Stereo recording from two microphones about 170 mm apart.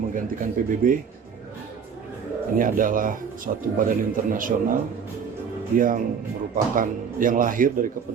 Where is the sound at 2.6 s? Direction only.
50° right (ahead or behind).